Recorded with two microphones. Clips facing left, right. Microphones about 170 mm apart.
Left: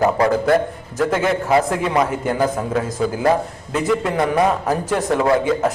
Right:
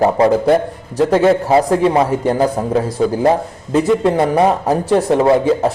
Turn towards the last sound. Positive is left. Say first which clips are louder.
# right 4 dB
turn(degrees=-30)  # may be behind; listen again after turning